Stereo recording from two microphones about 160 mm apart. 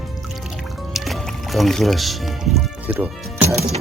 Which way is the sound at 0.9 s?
Centre (ahead or behind).